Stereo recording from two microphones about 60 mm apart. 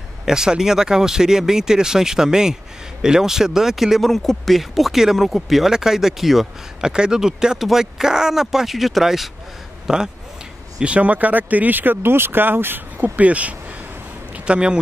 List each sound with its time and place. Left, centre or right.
0.2 s speech: centre
10.8 s speech: right